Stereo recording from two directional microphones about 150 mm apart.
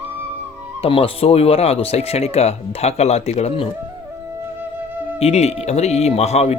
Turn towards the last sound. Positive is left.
turn(degrees=45)  # may be behind; listen again after turning